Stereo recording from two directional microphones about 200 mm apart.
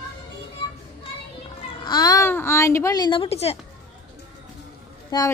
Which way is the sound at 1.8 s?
20° left (ahead or behind).